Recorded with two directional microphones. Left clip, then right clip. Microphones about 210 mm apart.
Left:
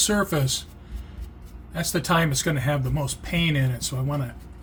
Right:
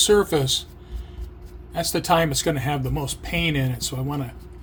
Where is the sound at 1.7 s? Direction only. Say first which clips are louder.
Right 3 dB; 30° right (ahead or behind).